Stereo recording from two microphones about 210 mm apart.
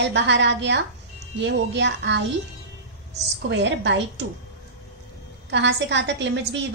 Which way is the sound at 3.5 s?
55° right (ahead or behind).